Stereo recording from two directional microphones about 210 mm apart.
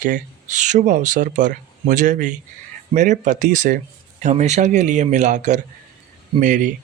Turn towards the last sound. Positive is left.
turn(degrees=-35)  # may be behind; listen again after turning